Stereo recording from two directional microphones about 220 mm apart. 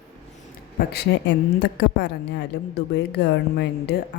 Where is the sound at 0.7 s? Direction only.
50° left (ahead or behind).